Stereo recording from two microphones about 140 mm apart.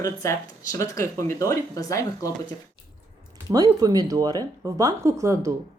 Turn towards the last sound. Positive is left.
turn(degrees=-20)  # may be behind; listen again after turning